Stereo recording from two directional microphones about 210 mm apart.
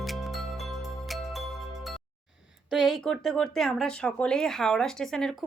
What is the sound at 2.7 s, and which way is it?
Speech, centre (ahead or behind).